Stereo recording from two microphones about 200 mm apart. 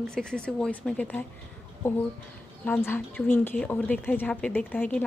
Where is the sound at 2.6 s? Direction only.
10° left (ahead or behind).